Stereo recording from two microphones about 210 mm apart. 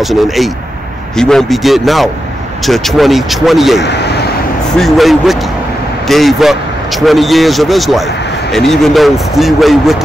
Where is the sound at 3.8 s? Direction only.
55° left (ahead or behind).